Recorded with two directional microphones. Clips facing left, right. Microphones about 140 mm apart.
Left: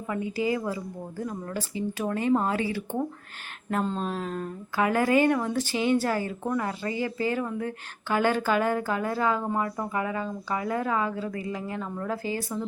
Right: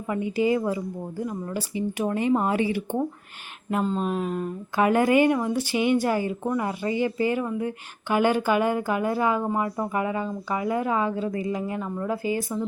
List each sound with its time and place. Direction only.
0.1 s a woman's voice: 20° right (ahead or behind)
3.7 s speech: 10° right (ahead or behind)